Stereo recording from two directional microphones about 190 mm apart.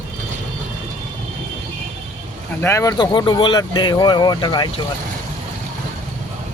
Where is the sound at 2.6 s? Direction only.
15° left (ahead or behind).